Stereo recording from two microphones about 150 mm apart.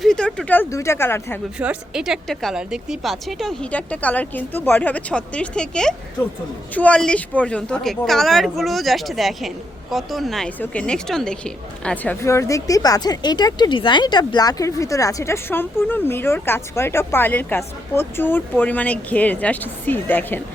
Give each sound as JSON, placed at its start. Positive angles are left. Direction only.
{"t": 0.0, "sound": "speech", "side_deg": 5}
{"t": 1.5, "sound": "a woman's voice", "side_deg": -5}
{"t": 12.2, "sound": "speech", "side_deg": 20}